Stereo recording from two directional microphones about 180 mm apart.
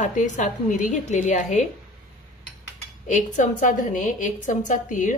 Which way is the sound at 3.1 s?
45° left (ahead or behind).